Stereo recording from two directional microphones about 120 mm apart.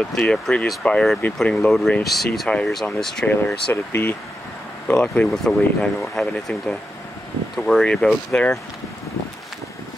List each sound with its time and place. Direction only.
0.1 s speech: 5° left (ahead or behind)
3.3 s speech: 15° left (ahead or behind)
7.5 s speech: centre (ahead or behind)